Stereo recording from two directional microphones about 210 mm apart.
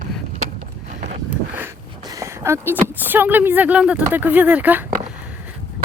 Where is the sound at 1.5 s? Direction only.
15° right (ahead or behind).